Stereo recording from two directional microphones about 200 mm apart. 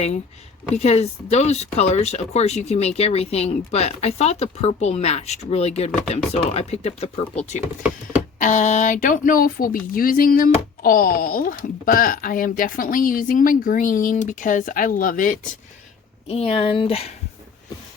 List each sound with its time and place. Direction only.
0.7 s speech: 30° left (ahead or behind)
16.3 s speech: 30° left (ahead or behind)